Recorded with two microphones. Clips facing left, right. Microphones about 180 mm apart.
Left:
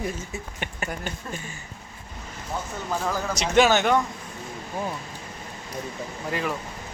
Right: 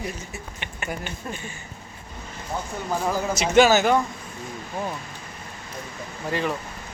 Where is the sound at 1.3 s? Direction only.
15° right (ahead or behind).